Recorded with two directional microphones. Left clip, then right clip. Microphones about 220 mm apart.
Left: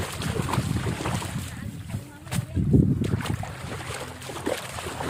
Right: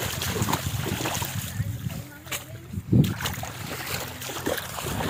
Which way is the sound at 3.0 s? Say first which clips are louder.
Right 1 dB; 45° right (ahead or behind).